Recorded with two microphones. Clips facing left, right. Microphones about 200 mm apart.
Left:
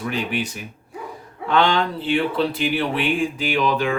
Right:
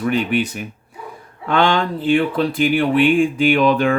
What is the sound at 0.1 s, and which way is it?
Speech, 60° right (ahead or behind).